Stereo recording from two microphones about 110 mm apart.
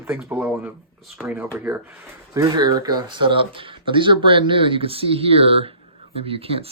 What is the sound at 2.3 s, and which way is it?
Speech, 35° right (ahead or behind).